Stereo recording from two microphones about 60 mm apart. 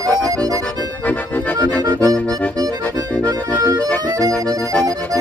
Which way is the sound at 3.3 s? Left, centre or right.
Right.